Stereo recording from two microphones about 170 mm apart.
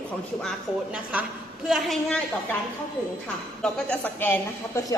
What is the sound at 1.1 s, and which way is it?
A woman's voice, 10° right (ahead or behind).